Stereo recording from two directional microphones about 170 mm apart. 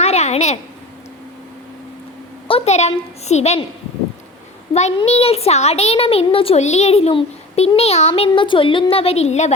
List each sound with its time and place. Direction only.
0.0 s a sound: 40° left (ahead or behind)
2.5 s speech: 35° left (ahead or behind)
4.7 s a child's voice: 40° left (ahead or behind)